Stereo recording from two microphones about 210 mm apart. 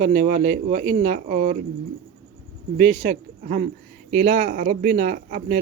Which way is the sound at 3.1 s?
40° right (ahead or behind).